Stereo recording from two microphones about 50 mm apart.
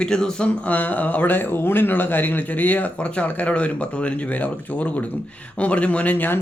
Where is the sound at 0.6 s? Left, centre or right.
Left.